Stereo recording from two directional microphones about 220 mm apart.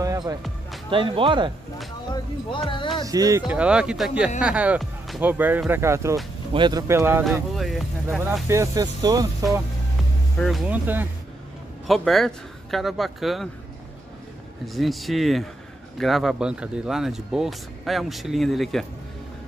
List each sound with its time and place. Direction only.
0.0 s music: 15° right (ahead or behind)
0.8 s speech: 25° right (ahead or behind)
2.1 s speech: 20° left (ahead or behind)
3.1 s speech: 15° right (ahead or behind)
7.5 s speech: centre (ahead or behind)
8.5 s speech: 15° right (ahead or behind)
10.3 s speech: centre (ahead or behind)
14.7 s speech: centre (ahead or behind)